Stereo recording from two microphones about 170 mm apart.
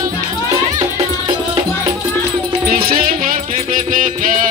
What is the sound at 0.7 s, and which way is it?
Music, 25° right (ahead or behind).